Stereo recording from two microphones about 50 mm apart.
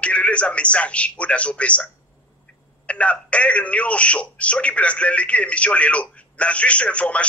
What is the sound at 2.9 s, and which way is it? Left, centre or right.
A man's voice, left.